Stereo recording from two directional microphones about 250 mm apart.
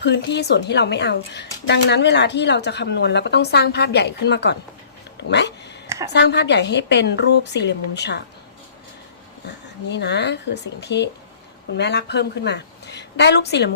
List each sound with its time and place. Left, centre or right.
0.0 s a woman's voice: left
5.3 s cat: left
6.1 s a woman's voice: left
9.9 s a woman's voice: left